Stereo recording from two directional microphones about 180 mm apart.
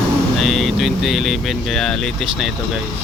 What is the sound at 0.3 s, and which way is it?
Speech, centre (ahead or behind).